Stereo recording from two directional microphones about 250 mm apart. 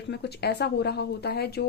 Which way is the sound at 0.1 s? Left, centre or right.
Left.